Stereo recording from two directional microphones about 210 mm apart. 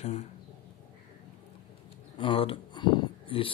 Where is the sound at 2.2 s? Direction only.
25° left (ahead or behind).